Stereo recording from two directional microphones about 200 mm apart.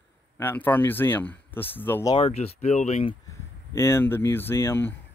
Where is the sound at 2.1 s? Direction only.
30° left (ahead or behind).